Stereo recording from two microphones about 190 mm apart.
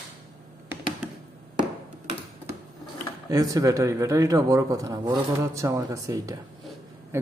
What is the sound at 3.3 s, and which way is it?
Speech, 20° right (ahead or behind).